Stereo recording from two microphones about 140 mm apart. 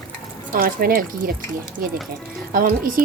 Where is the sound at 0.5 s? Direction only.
90° right.